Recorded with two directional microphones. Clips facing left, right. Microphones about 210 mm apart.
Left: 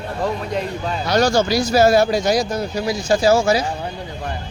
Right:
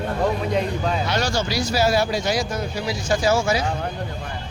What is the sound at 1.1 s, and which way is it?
Speech, 45° left (ahead or behind).